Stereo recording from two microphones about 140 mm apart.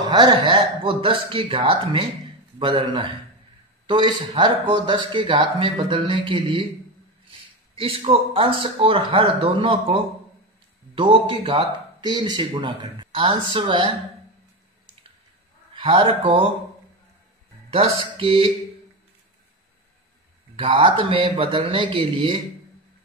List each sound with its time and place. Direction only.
0.0 s speech: 30° right (ahead or behind)
11.0 s speech: 35° right (ahead or behind)
15.7 s a man's voice: 35° right (ahead or behind)
17.6 s speech: 45° right (ahead or behind)
20.5 s speech: 40° right (ahead or behind)